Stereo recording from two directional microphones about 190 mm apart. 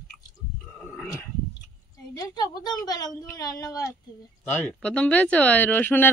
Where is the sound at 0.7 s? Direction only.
5° left (ahead or behind).